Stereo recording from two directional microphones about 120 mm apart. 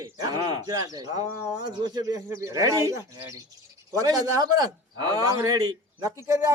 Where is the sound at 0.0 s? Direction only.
35° right (ahead or behind).